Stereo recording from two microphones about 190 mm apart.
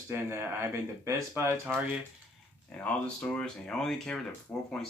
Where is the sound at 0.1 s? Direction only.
10° right (ahead or behind).